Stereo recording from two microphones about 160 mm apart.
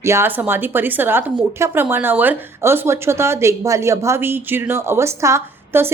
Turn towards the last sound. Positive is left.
turn(degrees=-15)  # may be behind; listen again after turning